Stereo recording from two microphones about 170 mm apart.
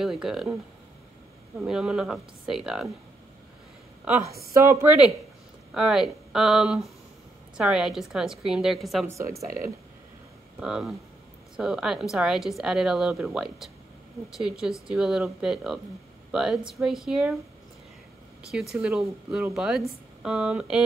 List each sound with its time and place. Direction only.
0.0 s a woman's voice: centre (ahead or behind)
1.6 s a woman's voice: 5° right (ahead or behind)
4.0 s a woman's voice: 15° right (ahead or behind)
4.3 s a woman's voice: 65° right (ahead or behind)
4.6 s a woman's voice: 10° right (ahead or behind)
9.0 s speech: 15° right (ahead or behind)
10.6 s a woman's voice: 5° right (ahead or behind)
18.5 s a woman's voice: centre (ahead or behind)